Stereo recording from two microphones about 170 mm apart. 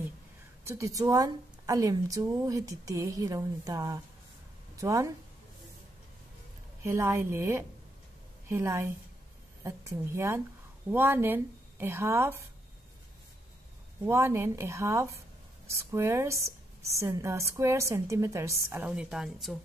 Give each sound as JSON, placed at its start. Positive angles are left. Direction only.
{"t": 0.7, "sound": "speech", "side_deg": -20}
{"t": 6.8, "sound": "speech", "side_deg": -15}
{"t": 14.0, "sound": "speech", "side_deg": -15}